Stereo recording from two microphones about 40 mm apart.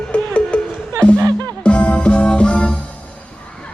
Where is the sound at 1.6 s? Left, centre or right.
Left.